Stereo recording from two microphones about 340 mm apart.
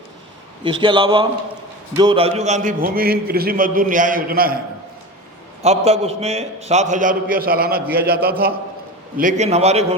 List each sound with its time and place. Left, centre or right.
0.6 s a man's voice: centre
5.8 s a man's voice: centre